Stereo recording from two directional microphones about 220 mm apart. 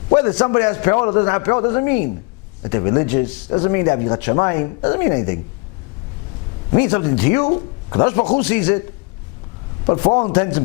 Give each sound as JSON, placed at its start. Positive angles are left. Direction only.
{"t": 0.2, "sound": "speech", "side_deg": 15}
{"t": 6.7, "sound": "speech", "side_deg": 15}
{"t": 9.8, "sound": "a man's voice", "side_deg": 30}
{"t": 10.3, "sound": "speech", "side_deg": 15}